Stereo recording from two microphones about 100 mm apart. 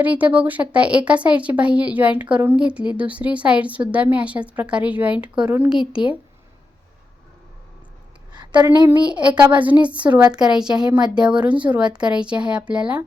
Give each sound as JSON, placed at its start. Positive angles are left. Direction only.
{"t": 0.0, "sound": "speech", "side_deg": -15}
{"t": 8.3, "sound": "a sound", "side_deg": -45}
{"t": 8.9, "sound": "speech", "side_deg": -10}